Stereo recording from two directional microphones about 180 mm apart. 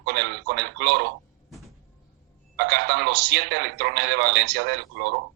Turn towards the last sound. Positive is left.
turn(degrees=-70)  # may be behind; listen again after turning